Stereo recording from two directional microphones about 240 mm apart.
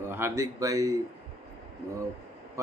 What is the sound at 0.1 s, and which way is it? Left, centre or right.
Speech, centre.